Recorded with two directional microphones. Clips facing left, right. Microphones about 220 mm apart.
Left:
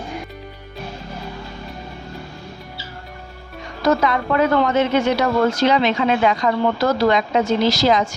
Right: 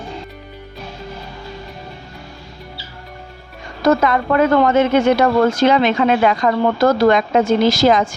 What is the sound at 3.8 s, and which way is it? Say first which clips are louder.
Speech: right 3 dB; 50° right (ahead or behind).